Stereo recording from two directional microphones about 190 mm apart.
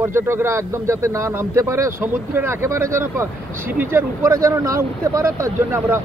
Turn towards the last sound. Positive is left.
turn(degrees=-15)  # may be behind; listen again after turning